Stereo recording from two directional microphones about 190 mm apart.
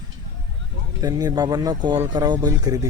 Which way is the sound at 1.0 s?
20° right (ahead or behind).